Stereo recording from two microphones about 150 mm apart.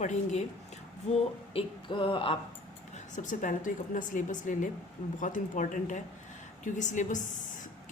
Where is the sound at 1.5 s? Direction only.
35° left (ahead or behind).